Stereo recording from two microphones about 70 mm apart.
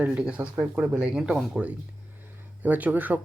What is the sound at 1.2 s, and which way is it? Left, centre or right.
Speech, centre.